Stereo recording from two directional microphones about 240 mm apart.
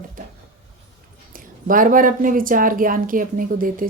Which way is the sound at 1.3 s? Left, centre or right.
Right.